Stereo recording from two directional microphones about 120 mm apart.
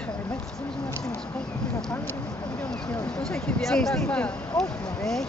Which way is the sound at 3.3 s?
5° left (ahead or behind).